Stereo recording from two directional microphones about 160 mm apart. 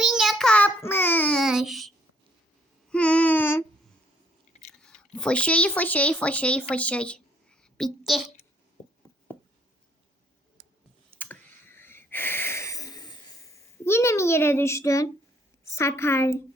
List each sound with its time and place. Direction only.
0.0 s child singing: centre (ahead or behind)
1.4 s child singing: centre (ahead or behind)
2.9 s child singing: 10° left (ahead or behind)
4.8 s speech: 5° left (ahead or behind)
8.8 s a sound: 30° left (ahead or behind)
11.2 s a sound: 15° left (ahead or behind)
15.7 s a woman's voice: 15° left (ahead or behind)